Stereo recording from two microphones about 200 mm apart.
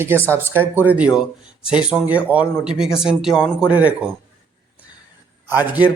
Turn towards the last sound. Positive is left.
turn(degrees=-10)  # may be behind; listen again after turning